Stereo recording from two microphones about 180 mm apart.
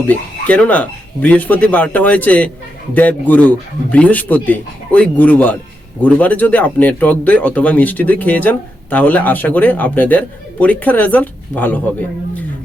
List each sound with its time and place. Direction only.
0.1 s speech: 10° left (ahead or behind)